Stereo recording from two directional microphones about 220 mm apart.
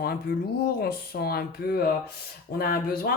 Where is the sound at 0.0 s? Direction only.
45° left (ahead or behind).